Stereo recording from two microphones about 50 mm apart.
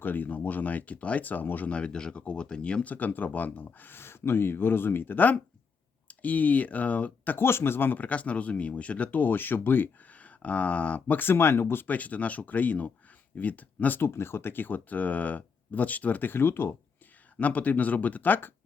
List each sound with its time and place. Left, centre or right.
0.0 s speech: left
1.7 s speech: centre
2.9 s speech: left
7.3 s speech: left
11.2 s speech: left
11.9 s speech: left
14.0 s speech: left
17.3 s speech: left